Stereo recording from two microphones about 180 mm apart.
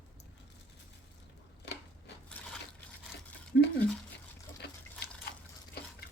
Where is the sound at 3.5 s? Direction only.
80° left.